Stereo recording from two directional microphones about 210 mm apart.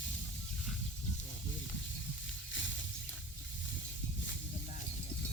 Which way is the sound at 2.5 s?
60° left (ahead or behind).